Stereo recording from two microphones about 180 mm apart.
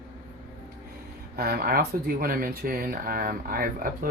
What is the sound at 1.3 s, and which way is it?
Speech, 55° right (ahead or behind).